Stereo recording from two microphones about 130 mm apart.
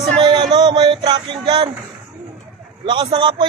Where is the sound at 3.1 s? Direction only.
35° right (ahead or behind).